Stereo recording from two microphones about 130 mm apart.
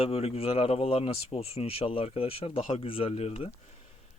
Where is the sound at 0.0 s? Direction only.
50° left (ahead or behind).